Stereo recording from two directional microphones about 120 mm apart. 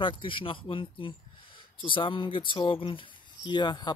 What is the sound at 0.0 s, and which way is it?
Speech, 45° left (ahead or behind).